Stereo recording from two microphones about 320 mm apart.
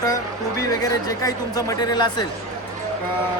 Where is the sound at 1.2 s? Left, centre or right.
Centre.